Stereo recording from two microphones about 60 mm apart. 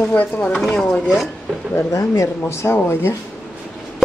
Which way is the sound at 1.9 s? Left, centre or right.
Left.